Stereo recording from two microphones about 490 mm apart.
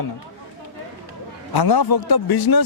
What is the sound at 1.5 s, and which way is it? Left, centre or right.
Speech, left.